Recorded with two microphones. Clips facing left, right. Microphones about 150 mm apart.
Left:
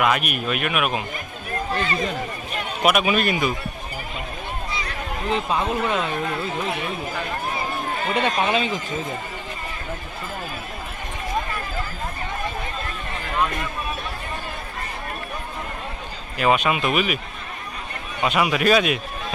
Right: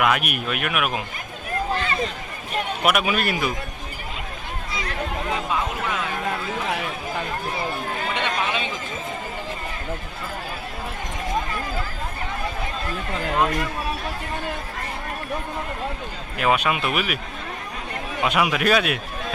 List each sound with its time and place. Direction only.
0.0 s speech: 5° right (ahead or behind)
2.8 s speech: centre (ahead or behind)
5.3 s speech: 25° left (ahead or behind)
8.1 s speech: 35° left (ahead or behind)
16.4 s speech: centre (ahead or behind)
18.2 s speech: 5° right (ahead or behind)